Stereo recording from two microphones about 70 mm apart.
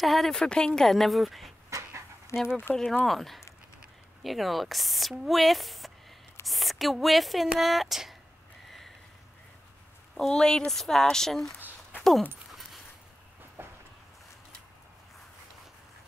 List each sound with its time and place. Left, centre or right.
0.0 s speech: centre
1.7 s dog: right
2.3 s speech: centre
2.7 s speech: centre
8.6 s a sound: centre
10.1 s speech: centre
13.6 s vehicle: right